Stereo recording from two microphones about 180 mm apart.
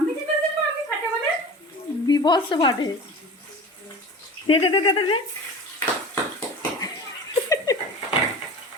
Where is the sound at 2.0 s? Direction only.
25° left (ahead or behind).